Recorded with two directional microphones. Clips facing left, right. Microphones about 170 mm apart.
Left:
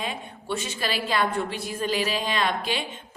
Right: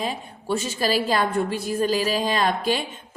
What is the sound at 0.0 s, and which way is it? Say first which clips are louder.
A woman's voice: right 4 dB; 40° right (ahead or behind).